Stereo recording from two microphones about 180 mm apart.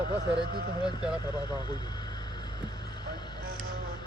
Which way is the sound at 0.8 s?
5° right (ahead or behind).